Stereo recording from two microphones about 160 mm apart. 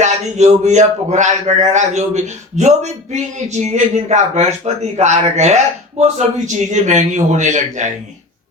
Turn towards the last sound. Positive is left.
turn(degrees=-50)  # may be behind; listen again after turning